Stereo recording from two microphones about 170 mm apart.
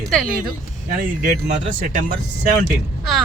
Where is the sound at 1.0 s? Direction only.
55° right (ahead or behind).